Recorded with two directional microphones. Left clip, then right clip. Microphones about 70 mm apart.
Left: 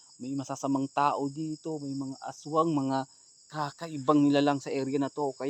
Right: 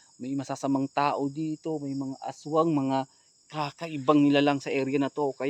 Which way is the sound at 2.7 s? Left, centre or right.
Centre.